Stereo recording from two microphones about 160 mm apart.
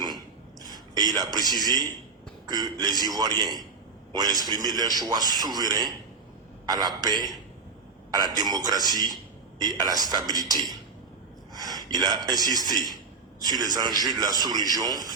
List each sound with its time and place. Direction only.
0.7 s a man's voice: 25° right (ahead or behind)
11.5 s gasp: 25° right (ahead or behind)
11.9 s a man's voice: 25° right (ahead or behind)